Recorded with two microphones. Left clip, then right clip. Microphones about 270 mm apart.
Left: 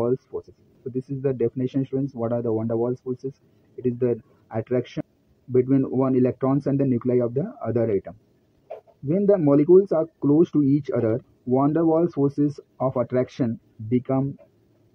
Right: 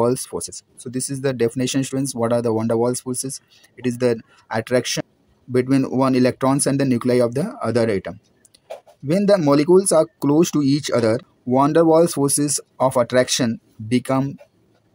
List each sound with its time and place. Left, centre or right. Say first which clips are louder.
0.0 s speech: right 5 dB; right
3.8 s speech: right 4 dB; right